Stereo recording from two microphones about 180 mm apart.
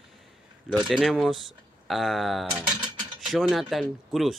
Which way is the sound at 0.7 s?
Centre (ahead or behind).